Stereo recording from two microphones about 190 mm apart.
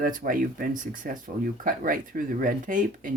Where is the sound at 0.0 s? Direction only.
45° right (ahead or behind).